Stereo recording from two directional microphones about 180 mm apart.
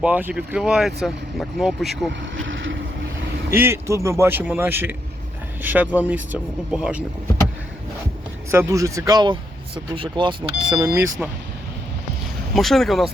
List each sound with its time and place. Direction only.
0.0 s speech: 10° right (ahead or behind)
2.3 s vehicle: 90° right
3.5 s speech: 15° right (ahead or behind)
8.4 s speech: 15° right (ahead or behind)
10.8 s speech: 15° right (ahead or behind)
12.5 s speech: centre (ahead or behind)